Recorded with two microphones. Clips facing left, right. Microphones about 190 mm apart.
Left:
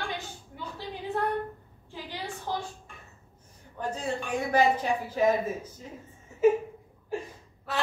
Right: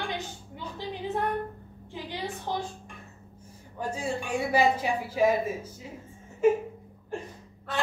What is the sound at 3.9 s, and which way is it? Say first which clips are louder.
Speech: right 1 dB; 10° right (ahead or behind).